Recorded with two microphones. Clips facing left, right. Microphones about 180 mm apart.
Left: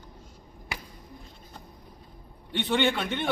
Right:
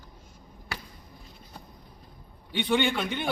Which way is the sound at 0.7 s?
20° left (ahead or behind).